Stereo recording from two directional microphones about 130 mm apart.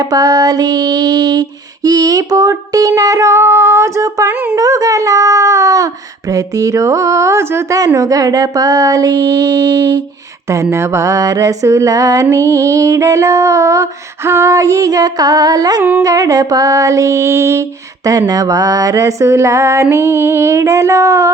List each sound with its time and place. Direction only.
0.0 s music: 30° right (ahead or behind)
15.8 s music: 15° right (ahead or behind)
16.0 s music: 25° right (ahead or behind)